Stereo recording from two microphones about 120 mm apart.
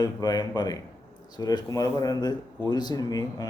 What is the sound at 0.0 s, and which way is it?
Speech, 35° left (ahead or behind).